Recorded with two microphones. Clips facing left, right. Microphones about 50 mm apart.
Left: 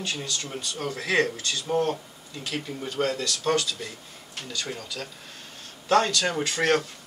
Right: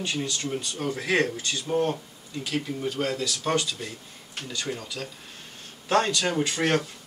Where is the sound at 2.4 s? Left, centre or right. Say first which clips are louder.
Right 3 dB; centre.